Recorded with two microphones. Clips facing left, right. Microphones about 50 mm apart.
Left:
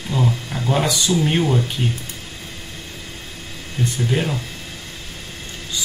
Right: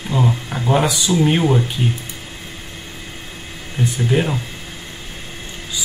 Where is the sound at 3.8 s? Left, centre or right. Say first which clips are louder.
Right 2 dB; right.